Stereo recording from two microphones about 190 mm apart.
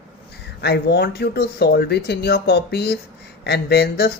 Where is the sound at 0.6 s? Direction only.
60° left (ahead or behind).